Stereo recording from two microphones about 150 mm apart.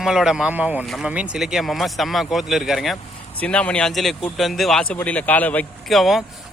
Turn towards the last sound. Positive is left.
turn(degrees=0)  # may be behind; listen again after turning